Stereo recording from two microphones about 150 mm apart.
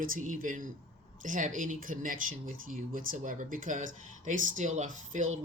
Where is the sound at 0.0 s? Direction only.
65° right (ahead or behind).